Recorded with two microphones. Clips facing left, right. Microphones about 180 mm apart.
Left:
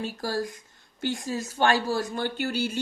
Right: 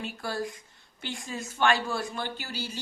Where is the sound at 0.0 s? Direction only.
40° left (ahead or behind).